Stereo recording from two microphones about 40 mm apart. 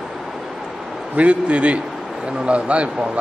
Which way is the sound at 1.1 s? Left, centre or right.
Right.